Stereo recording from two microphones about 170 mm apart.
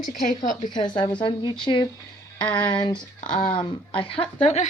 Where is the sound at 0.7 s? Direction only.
25° left (ahead or behind).